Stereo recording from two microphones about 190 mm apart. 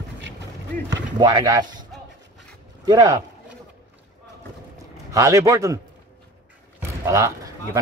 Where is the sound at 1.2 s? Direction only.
20° right (ahead or behind).